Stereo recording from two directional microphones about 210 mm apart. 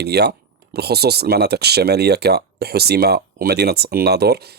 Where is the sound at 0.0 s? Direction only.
50° right (ahead or behind).